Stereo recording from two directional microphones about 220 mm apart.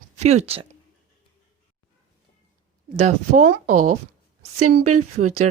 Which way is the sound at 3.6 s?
90° right.